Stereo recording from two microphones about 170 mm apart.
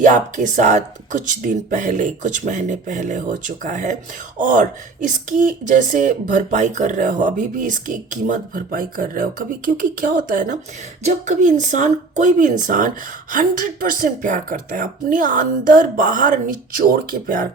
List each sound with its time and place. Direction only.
0.0 s speech: 45° right (ahead or behind)